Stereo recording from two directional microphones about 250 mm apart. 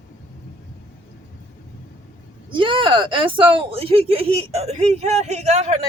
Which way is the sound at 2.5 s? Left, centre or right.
Centre.